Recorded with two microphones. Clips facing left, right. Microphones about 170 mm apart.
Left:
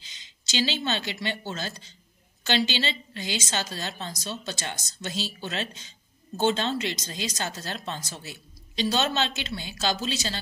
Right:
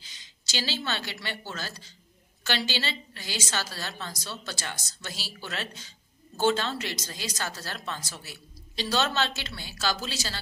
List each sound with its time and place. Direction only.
0.0 s a woman's voice: 20° left (ahead or behind)